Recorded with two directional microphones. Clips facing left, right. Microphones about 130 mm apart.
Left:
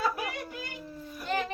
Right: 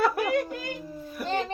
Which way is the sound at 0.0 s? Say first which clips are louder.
Right 8 dB; 60° right (ahead or behind).